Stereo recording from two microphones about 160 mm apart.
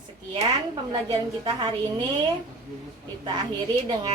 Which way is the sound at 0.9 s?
30° right (ahead or behind).